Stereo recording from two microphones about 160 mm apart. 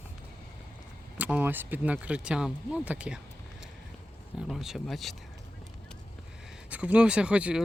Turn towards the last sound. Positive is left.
turn(degrees=-5)  # may be behind; listen again after turning